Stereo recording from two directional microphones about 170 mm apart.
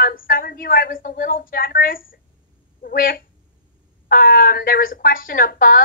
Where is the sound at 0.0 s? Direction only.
55° left (ahead or behind).